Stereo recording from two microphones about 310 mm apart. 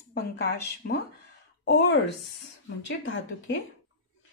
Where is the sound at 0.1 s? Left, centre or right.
Left.